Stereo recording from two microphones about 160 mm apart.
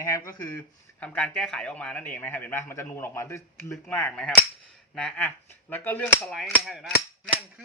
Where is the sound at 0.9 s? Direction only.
10° left (ahead or behind).